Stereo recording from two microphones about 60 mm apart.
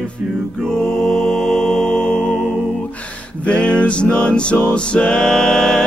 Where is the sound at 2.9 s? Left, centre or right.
Left.